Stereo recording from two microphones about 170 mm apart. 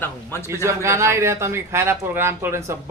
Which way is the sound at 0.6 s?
15° right (ahead or behind).